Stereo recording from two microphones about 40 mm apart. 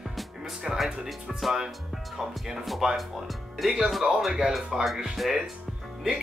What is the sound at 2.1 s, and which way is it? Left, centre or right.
Speech, centre.